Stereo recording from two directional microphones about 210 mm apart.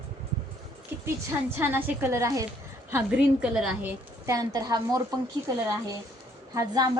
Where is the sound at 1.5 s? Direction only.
10° right (ahead or behind).